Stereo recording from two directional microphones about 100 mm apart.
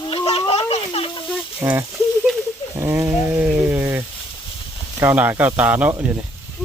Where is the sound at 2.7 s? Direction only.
25° right (ahead or behind).